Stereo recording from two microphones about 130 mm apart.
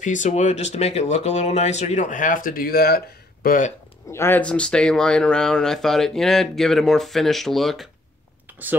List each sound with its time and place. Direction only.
0.0 s speech: 75° left (ahead or behind); by 3.7 s 90° left
4.1 s speech: 20° left (ahead or behind); by 7.9 s centre (ahead or behind)